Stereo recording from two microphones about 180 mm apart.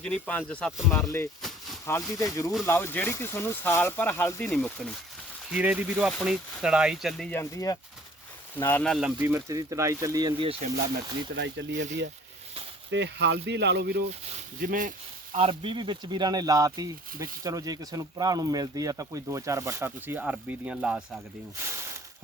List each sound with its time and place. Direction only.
0.0 s speech: 5° left (ahead or behind)
1.4 s a sound: centre (ahead or behind)
2.1 s speech: 20° left (ahead or behind)
5.5 s speech: 5° right (ahead or behind)
9.2 s speech: 15° right (ahead or behind); by 10.7 s 30° right (ahead or behind)
11.3 s speech: 80° right
12.9 s speech: 75° right (ahead or behind)
14.1 s speech: 45° right (ahead or behind)
15.4 s speech: 30° right (ahead or behind)